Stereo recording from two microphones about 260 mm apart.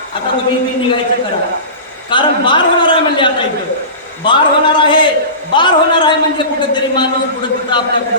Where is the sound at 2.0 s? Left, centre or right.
Centre.